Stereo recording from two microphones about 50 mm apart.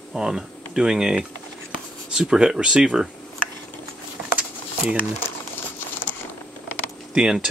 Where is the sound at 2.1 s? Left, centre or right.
Centre.